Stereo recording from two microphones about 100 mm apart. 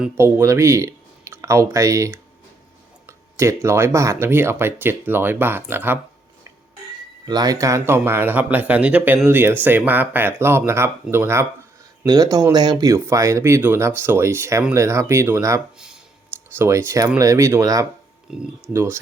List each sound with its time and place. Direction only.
0.2 s speech: 25° right (ahead or behind)
7.3 s speech: 40° right (ahead or behind); by 11.4 s 25° right (ahead or behind)
12.0 s speech: 40° right (ahead or behind)
13.1 s speech: 30° right (ahead or behind)
18.3 s speech: 5° right (ahead or behind)
18.7 s speech: 25° right (ahead or behind)